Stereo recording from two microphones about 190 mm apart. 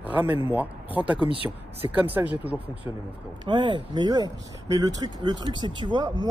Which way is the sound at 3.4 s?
25° right (ahead or behind).